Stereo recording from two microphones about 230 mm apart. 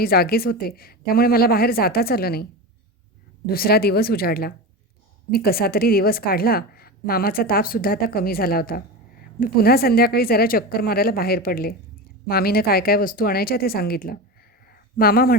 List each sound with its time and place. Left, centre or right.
0.0 s a woman's voice: left
3.5 s a woman's voice: left